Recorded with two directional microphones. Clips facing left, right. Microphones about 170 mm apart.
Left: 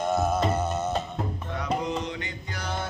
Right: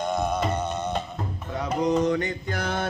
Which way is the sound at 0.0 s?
5° left (ahead or behind).